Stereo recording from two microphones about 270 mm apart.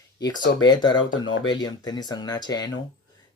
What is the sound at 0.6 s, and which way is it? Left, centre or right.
Speech, centre.